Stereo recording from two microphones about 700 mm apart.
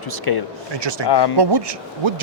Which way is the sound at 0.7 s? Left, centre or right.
Right.